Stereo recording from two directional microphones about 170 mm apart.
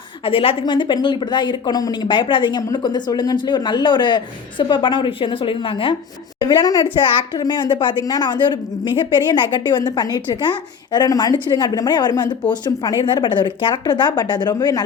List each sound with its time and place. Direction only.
0.3 s a woman's voice: 30° left (ahead or behind)